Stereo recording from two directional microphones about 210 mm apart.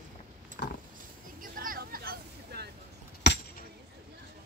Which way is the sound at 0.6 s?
50° left (ahead or behind).